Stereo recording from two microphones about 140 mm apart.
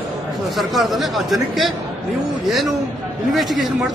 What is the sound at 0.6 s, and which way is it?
Speech, centre (ahead or behind).